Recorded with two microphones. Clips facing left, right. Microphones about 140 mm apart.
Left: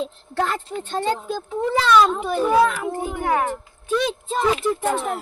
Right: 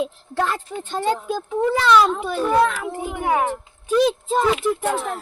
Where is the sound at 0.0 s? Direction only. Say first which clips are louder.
Right 1 dB; 5° right (ahead or behind).